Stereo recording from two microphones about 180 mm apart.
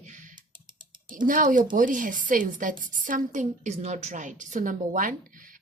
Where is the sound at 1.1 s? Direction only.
50° right (ahead or behind).